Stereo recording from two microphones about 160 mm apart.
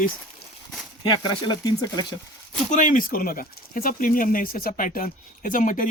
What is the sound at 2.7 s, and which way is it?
Speech, 55° left (ahead or behind).